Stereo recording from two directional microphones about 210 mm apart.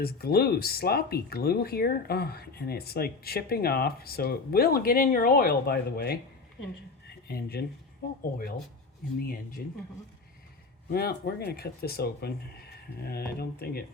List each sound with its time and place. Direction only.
0.0 s speech: 45° left (ahead or behind)
7.3 s speech: 50° left (ahead or behind)
10.8 s speech: 45° left (ahead or behind)